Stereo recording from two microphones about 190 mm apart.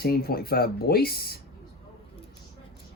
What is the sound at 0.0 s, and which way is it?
Mantra, 55° left (ahead or behind).